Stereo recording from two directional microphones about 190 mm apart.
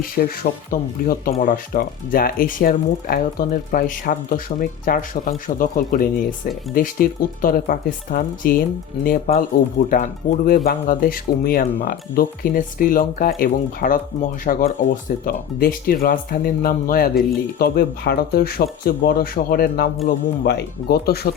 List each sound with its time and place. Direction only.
0.7 s speech: 50° left (ahead or behind)